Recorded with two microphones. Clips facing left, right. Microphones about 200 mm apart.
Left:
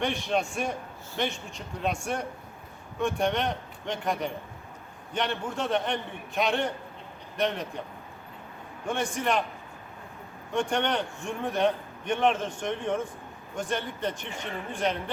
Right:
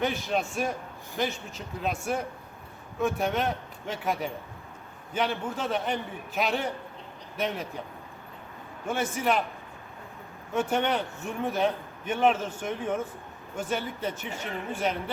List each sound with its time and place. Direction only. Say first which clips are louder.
0.0 s a man's voice: even; centre (ahead or behind)
8.9 s a man's voice: right 1 dB; 5° right (ahead or behind)
10.5 s a man's voice: right 1 dB; 5° right (ahead or behind)